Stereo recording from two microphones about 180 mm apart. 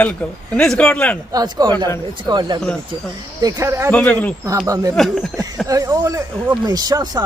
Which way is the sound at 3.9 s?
10° left (ahead or behind).